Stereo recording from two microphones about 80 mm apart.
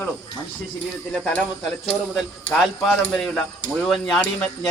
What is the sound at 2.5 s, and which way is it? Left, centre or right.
Speech, centre.